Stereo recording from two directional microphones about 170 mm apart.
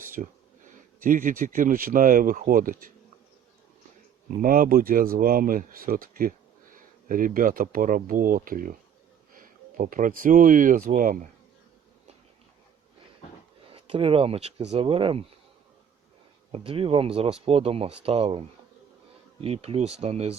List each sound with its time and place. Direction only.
0.2 s speech: 45° right (ahead or behind)
4.4 s speech: 55° right (ahead or behind)
13.7 s speech: 35° right (ahead or behind)
16.5 s speech: 35° right (ahead or behind)